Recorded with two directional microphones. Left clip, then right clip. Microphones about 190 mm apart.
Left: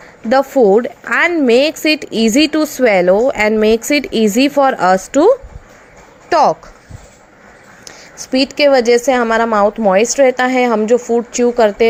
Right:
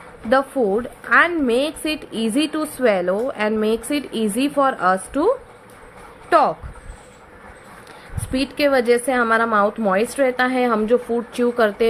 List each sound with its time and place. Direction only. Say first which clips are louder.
0.3 s a woman's voice: left 8 dB; 30° left (ahead or behind)
6.2 s a sound: left 4 dB; 25° left (ahead or behind)
8.3 s a woman's voice: left 8 dB; 30° left (ahead or behind)